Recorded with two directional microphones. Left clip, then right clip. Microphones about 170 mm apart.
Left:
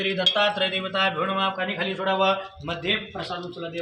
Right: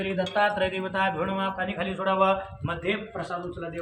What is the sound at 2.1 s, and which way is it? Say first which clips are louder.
Speech: even; 50° left (ahead or behind).